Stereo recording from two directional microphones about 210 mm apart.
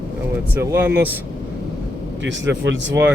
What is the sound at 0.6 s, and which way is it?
Speech, 10° right (ahead or behind).